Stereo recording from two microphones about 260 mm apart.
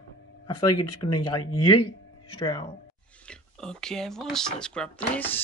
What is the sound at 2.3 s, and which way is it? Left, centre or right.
Speech, centre.